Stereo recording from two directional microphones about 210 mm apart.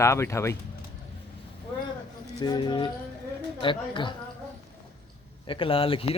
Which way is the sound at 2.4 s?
20° left (ahead or behind).